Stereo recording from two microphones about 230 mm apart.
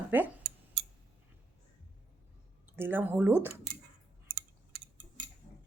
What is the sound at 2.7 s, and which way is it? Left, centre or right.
Speech, centre.